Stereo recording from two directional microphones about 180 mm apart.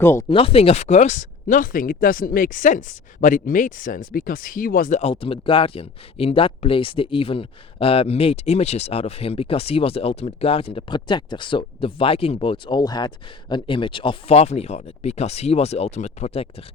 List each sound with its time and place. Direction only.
0.0 s speech: 15° left (ahead or behind)
0.3 s speech: 30° left (ahead or behind)